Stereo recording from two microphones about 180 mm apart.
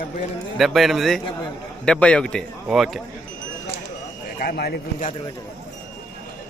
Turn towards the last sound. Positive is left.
turn(degrees=65)  # may be behind; listen again after turning